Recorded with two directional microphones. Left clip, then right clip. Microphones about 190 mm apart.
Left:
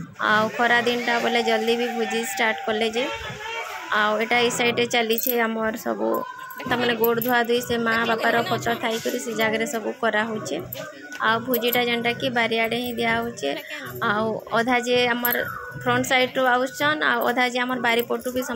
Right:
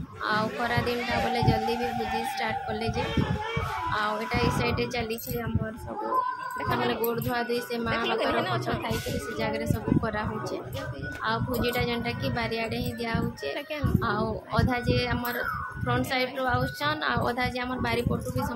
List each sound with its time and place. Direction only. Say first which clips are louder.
0.2 s music: left 8 dB; 35° left (ahead or behind)
3.9 s music: left 10 dB; 30° left (ahead or behind)
6.9 s a woman's voice: left 7 dB; 30° left (ahead or behind)
9.4 s music: left 8 dB; 30° left (ahead or behind)
11.2 s a woman's voice: left 7 dB; 30° left (ahead or behind)